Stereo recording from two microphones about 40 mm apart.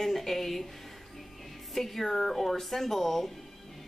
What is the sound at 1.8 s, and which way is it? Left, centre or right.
A woman's voice, centre.